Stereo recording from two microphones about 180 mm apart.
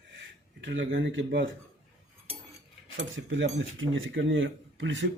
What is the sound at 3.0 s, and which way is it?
Speech, 90° right.